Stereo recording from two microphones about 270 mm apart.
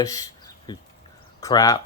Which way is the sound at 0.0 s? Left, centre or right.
Centre.